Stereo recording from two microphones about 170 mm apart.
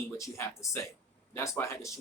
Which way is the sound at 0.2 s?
15° left (ahead or behind).